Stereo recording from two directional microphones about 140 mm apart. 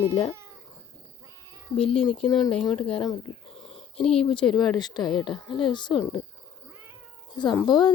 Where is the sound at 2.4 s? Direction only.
Centre (ahead or behind).